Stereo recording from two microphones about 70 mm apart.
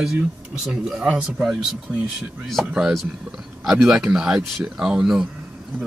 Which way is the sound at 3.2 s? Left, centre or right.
Centre.